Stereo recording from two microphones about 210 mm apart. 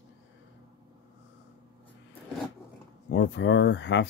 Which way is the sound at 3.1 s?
55° left (ahead or behind).